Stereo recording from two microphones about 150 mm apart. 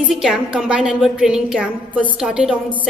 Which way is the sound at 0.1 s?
5° right (ahead or behind).